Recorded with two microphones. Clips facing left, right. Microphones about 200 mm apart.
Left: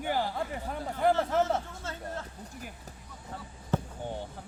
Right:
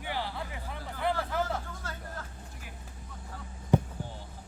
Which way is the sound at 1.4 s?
25° left (ahead or behind).